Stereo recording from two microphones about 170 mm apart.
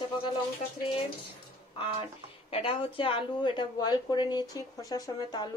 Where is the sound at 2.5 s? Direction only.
35° left (ahead or behind).